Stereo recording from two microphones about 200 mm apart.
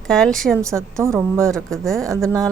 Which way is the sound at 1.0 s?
15° right (ahead or behind).